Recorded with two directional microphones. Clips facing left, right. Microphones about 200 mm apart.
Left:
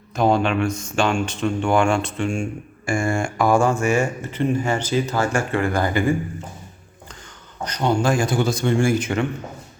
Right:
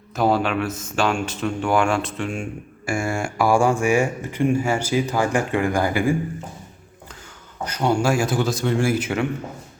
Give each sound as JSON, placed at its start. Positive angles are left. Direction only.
{"t": 0.2, "sound": "speech", "side_deg": -5}
{"t": 7.6, "sound": "speech", "side_deg": -5}